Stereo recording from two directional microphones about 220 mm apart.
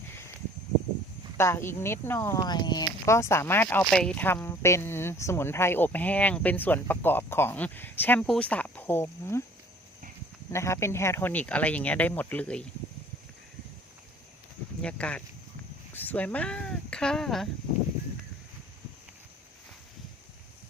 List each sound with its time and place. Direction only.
1.4 s speech: 10° left (ahead or behind)
10.5 s speech: 10° left (ahead or behind)
14.8 s speech: 5° left (ahead or behind)